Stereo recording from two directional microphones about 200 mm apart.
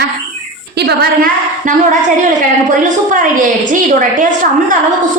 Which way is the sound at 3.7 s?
40° right (ahead or behind).